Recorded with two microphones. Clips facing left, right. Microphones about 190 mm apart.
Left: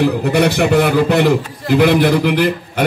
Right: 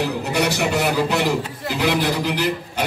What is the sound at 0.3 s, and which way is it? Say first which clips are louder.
A man's voice: left 6 dB; 55° left (ahead or behind).